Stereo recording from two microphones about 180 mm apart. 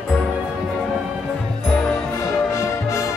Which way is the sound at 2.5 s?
15° left (ahead or behind).